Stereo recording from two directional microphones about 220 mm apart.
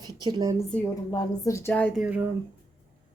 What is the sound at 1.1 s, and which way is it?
Speech, 15° left (ahead or behind).